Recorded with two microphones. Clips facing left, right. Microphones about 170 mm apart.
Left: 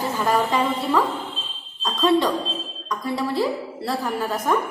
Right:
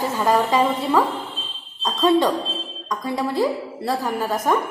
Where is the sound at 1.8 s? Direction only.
20° right (ahead or behind).